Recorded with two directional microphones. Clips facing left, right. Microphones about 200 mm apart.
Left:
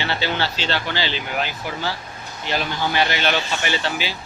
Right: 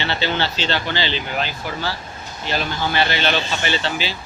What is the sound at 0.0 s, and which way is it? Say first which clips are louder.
Speech: right 1 dB; 10° left (ahead or behind).